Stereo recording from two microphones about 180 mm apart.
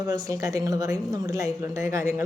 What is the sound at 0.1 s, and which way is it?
A woman's voice, 20° right (ahead or behind).